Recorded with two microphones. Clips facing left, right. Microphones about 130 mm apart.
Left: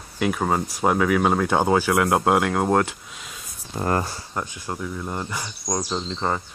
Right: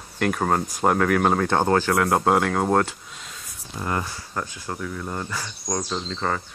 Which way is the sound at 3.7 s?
45° left (ahead or behind).